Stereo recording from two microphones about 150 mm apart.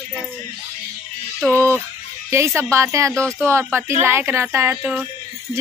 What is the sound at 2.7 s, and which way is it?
Music, 20° right (ahead or behind).